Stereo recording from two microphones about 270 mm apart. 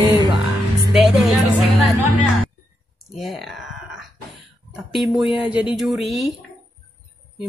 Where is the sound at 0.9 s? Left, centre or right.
Centre.